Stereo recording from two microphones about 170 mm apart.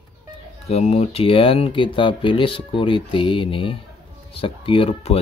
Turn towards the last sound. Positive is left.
turn(degrees=35)  # may be behind; listen again after turning